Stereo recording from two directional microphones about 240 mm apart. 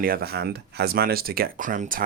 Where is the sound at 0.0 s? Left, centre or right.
Right.